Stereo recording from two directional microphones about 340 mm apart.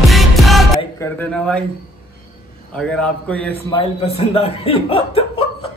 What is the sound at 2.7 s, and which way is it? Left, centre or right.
Speech, centre.